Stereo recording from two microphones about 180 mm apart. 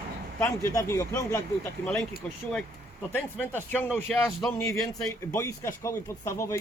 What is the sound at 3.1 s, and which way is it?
A man's voice, 10° left (ahead or behind).